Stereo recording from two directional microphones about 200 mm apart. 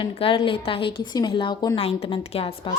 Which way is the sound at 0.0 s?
25° left (ahead or behind).